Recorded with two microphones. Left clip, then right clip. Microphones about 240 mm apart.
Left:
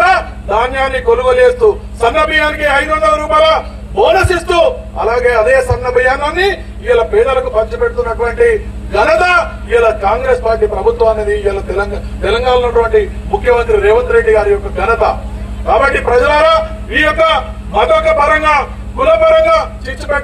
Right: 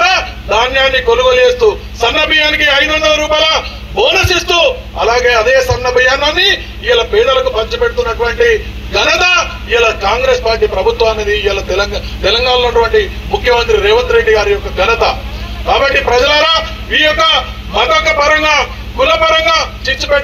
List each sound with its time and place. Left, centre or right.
0.0 s a man's voice: left
7.9 s speech: left
8.3 s a man's voice: left
13.8 s a man's voice: left